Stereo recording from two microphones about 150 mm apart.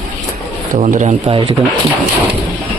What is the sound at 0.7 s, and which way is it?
Speech, 55° right (ahead or behind).